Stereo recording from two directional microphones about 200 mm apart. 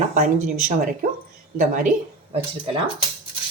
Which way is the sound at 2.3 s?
25° right (ahead or behind).